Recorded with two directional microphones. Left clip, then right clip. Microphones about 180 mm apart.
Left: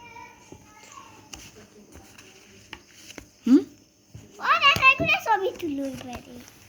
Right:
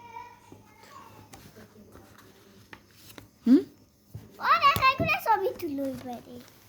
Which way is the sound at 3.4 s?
20° right (ahead or behind).